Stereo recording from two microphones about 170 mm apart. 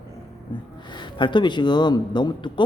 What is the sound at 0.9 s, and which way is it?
Speech, 25° left (ahead or behind).